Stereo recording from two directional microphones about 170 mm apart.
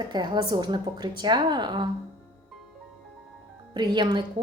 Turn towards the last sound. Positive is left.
turn(degrees=-25)  # may be behind; listen again after turning